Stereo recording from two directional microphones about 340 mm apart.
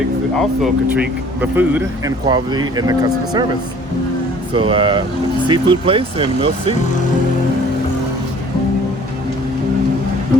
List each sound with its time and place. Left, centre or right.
0.3 s speech: centre
4.5 s speech: centre